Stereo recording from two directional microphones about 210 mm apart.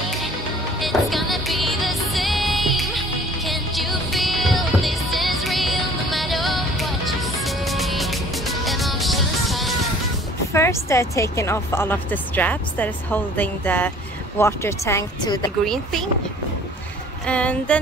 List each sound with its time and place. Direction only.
0.7 s music: centre (ahead or behind)
10.5 s a woman's voice: 15° left (ahead or behind)
15.6 s music: centre (ahead or behind)
17.3 s music: 5° left (ahead or behind)